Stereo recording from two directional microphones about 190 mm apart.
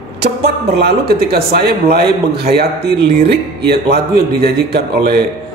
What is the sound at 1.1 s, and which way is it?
Speech, 55° right (ahead or behind).